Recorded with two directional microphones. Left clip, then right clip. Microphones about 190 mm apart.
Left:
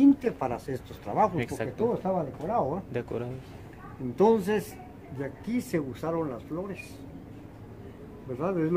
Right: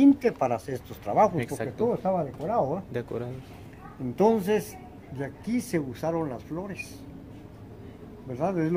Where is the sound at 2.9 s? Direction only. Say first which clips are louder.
Even; 5° right (ahead or behind).